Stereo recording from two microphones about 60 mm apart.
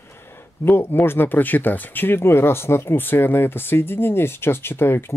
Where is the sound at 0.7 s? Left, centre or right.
Left.